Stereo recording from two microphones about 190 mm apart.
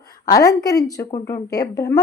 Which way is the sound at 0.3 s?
20° left (ahead or behind).